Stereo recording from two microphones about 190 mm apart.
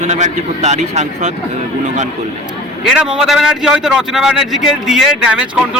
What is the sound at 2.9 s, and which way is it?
A man's voice, 5° right (ahead or behind).